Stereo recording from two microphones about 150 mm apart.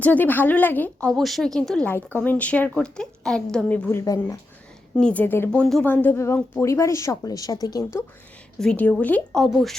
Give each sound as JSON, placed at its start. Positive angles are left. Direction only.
{"t": 0.0, "sound": "speech", "side_deg": 10}
{"t": 4.0, "sound": "a woman's voice", "side_deg": 25}
{"t": 4.9, "sound": "a woman's voice", "side_deg": 10}
{"t": 8.5, "sound": "speech", "side_deg": 5}